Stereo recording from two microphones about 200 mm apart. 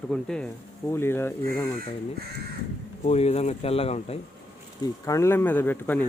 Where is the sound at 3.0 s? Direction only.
30° left (ahead or behind).